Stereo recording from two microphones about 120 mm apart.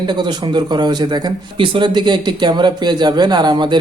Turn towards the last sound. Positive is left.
turn(degrees=-40)  # may be behind; listen again after turning